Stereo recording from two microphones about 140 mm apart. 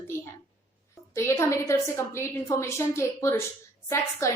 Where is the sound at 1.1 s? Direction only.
20° left (ahead or behind).